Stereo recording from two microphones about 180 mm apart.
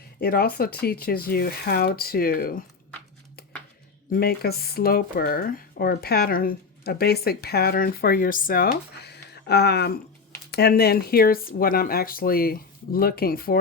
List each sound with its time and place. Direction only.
0.2 s speech: 55° left (ahead or behind)
4.1 s speech: 60° left (ahead or behind)